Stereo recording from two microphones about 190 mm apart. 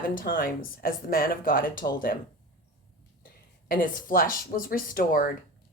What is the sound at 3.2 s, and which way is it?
A woman's voice, 50° left (ahead or behind).